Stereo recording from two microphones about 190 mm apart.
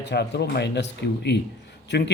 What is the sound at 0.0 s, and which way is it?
Speech, 60° left (ahead or behind).